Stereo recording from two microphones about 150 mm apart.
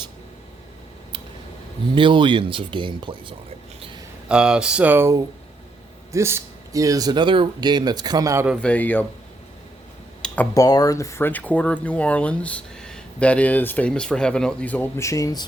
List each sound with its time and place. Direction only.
2.0 s speech: 35° right (ahead or behind)
4.3 s speech: 5° right (ahead or behind); by 8.4 s 20° right (ahead or behind)
8.6 s speech: 10° left (ahead or behind)
10.5 s speech: 25° left (ahead or behind)